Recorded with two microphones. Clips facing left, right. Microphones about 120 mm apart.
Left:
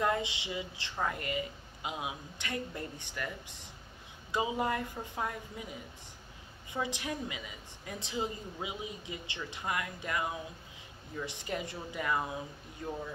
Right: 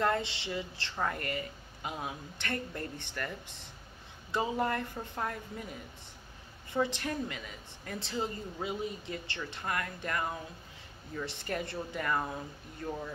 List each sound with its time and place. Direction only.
0.0 s a woman's voice: 10° left (ahead or behind)
4.3 s a woman's voice: 10° left (ahead or behind)